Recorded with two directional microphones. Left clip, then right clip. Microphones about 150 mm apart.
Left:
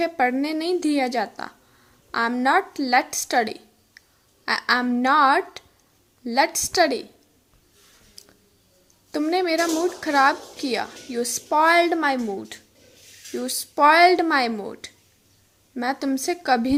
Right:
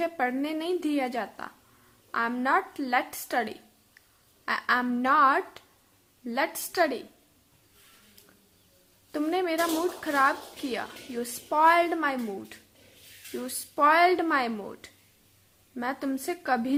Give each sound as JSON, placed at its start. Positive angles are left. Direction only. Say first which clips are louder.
{"t": 0.0, "sound": "a woman's voice", "louder": "left 7 dB", "side_deg": 30}
{"t": 3.2, "sound": "a sound", "louder": "left 7 dB", "side_deg": 30}
{"t": 4.4, "sound": "a woman's voice", "louder": "left 5 dB", "side_deg": 30}
{"t": 9.1, "sound": "a woman's voice", "louder": "left 6 dB", "side_deg": 30}